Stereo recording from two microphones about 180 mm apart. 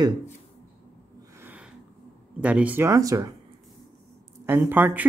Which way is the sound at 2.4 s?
5° right (ahead or behind).